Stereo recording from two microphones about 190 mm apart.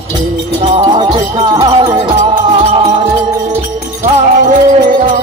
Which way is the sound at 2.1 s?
40° right (ahead or behind).